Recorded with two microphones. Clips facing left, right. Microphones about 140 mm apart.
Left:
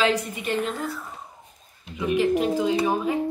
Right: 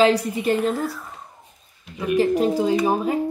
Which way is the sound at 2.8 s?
40° right (ahead or behind).